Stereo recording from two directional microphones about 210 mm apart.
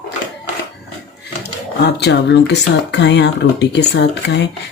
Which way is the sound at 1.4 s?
55° left (ahead or behind).